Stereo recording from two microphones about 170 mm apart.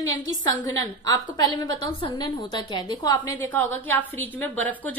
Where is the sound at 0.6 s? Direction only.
20° left (ahead or behind).